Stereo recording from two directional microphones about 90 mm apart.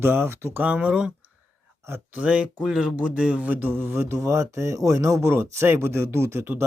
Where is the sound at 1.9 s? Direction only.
25° right (ahead or behind).